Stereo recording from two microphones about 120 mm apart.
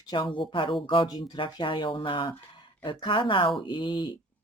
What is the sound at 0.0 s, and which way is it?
Speech, 40° left (ahead or behind).